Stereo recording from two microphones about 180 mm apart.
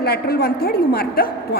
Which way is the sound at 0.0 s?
60° left (ahead or behind).